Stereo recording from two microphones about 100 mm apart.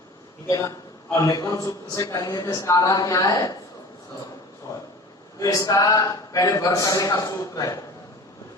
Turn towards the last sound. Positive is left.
turn(degrees=35)  # may be behind; listen again after turning